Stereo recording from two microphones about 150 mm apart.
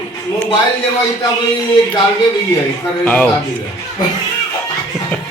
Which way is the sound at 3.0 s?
10° left (ahead or behind).